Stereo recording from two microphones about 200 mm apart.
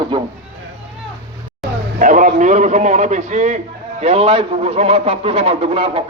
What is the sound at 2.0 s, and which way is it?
A man's voice, 40° right (ahead or behind).